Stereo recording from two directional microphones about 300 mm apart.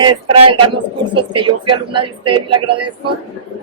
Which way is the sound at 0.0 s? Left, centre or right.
Centre.